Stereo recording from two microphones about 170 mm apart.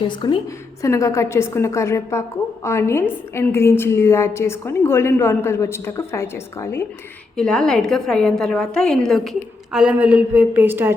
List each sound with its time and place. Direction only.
0.0 s a woman's voice: 30° left (ahead or behind); by 10.9 s 10° right (ahead or behind)